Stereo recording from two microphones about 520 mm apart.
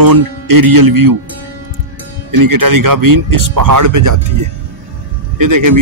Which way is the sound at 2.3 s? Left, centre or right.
Right.